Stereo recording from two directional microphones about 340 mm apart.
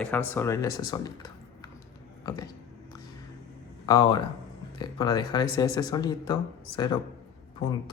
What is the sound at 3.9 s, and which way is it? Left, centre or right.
Speech, centre.